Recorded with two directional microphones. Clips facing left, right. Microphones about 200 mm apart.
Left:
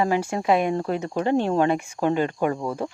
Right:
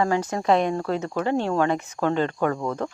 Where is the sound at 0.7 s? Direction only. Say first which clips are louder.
Left 1 dB; 20° left (ahead or behind).